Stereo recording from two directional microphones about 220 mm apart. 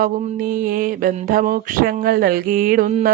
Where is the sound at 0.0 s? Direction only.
40° right (ahead or behind).